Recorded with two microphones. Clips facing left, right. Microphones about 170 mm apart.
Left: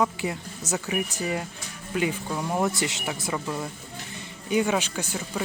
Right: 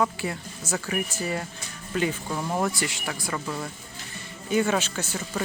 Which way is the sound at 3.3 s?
10° left (ahead or behind).